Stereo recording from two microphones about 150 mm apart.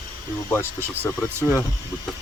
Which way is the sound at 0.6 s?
15° right (ahead or behind).